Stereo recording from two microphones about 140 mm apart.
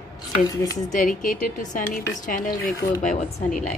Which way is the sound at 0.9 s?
70° left (ahead or behind).